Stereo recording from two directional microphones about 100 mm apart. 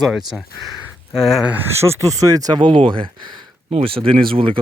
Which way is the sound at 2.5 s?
50° right (ahead or behind).